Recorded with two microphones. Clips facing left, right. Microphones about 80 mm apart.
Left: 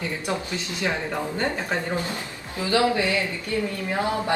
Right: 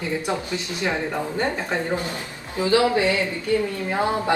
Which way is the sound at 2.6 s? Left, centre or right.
Right.